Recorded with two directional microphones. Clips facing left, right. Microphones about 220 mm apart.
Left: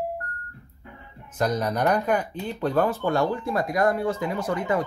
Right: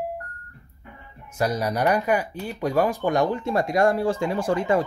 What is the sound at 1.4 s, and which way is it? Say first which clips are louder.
Speech: even; 10° right (ahead or behind).